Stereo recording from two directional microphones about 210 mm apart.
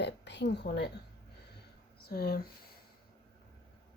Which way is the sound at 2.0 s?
45° left (ahead or behind).